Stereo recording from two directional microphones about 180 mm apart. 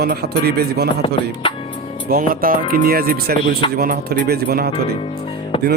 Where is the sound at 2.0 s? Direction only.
55° right (ahead or behind).